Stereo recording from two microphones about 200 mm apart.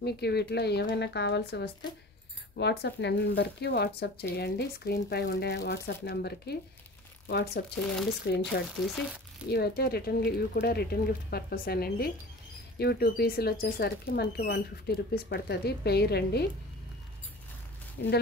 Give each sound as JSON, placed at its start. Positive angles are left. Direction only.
{"t": 0.0, "sound": "speech", "side_deg": 55}
{"t": 18.0, "sound": "speech", "side_deg": 55}